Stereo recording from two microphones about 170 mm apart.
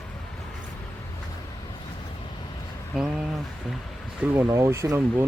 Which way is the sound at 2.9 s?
Centre (ahead or behind).